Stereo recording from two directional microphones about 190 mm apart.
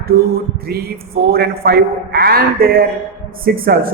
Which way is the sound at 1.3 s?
55° right (ahead or behind).